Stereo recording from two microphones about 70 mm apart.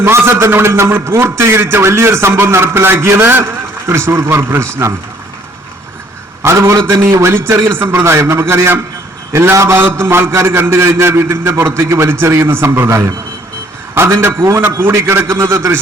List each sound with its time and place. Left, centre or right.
0.0 s a man's voice: right
6.4 s a man's voice: right